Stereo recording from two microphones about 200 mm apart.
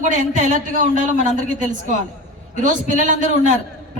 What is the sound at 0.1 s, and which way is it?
A man's voice, 40° right (ahead or behind).